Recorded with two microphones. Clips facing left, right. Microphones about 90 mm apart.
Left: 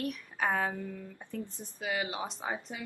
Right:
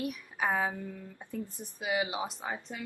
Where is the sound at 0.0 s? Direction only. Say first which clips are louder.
Even; 10° right (ahead or behind).